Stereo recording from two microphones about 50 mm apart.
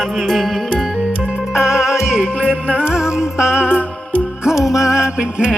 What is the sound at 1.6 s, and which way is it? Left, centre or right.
Music, centre.